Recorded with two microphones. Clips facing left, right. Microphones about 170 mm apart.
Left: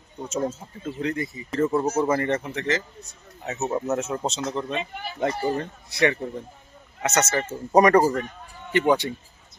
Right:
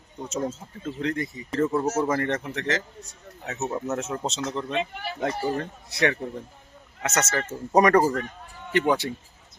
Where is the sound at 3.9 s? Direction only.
5° left (ahead or behind).